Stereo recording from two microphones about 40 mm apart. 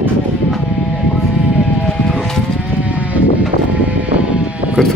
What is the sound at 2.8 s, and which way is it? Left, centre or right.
Sheep, right.